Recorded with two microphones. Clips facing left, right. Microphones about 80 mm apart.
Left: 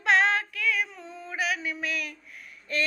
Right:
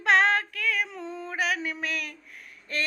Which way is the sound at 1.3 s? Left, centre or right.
Right.